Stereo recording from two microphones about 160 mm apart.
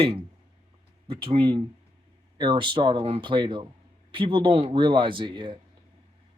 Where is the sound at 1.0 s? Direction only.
35° right (ahead or behind).